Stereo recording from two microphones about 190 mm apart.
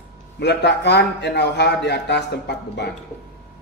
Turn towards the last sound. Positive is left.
turn(degrees=60)  # may be behind; listen again after turning